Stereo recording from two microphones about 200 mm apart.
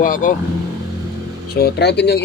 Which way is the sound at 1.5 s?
55° left (ahead or behind).